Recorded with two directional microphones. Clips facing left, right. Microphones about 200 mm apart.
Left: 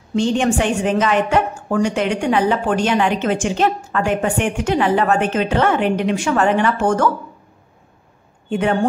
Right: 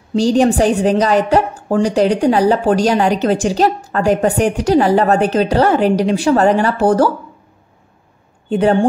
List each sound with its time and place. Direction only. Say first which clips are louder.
0.1 s a woman's voice: right 5 dB; 35° right (ahead or behind)
8.5 s speech: right 5 dB; 35° right (ahead or behind)